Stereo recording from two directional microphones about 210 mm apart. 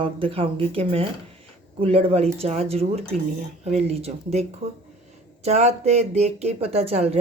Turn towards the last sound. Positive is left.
turn(degrees=-30)  # may be behind; listen again after turning